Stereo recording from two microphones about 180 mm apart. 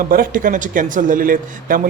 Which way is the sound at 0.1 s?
50° right (ahead or behind).